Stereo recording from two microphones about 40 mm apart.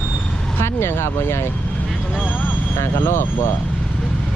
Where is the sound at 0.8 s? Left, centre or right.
Left.